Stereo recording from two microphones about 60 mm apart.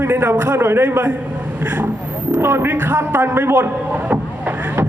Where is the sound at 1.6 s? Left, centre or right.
Right.